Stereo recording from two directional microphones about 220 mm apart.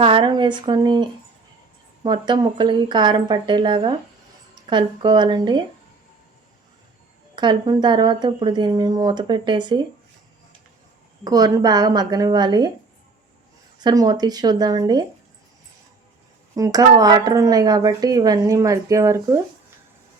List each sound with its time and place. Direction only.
0.0 s speech: 25° right (ahead or behind)
2.0 s speech: 20° right (ahead or behind)
7.3 s speech: 20° right (ahead or behind)
11.2 s a woman's voice: 15° right (ahead or behind)
13.7 s a woman's voice: 15° right (ahead or behind)
16.6 s a woman's voice: 15° right (ahead or behind)